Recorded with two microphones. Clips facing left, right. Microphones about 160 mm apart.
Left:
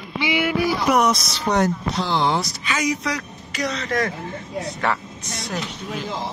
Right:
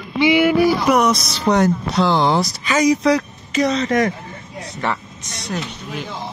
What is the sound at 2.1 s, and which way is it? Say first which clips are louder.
Speech: right 1 dB; 40° right (ahead or behind).